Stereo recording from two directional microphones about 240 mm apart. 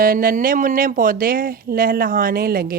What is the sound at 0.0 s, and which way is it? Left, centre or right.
A woman's voice, right.